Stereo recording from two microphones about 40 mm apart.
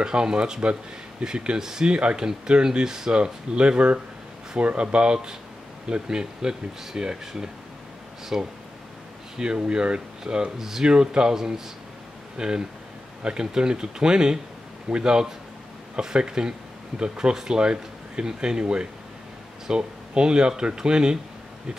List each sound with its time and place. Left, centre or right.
0.0 s speech: right
1.9 s speech: right